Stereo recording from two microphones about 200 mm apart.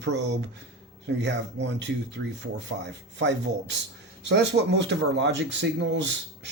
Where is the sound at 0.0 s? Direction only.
60° right (ahead or behind).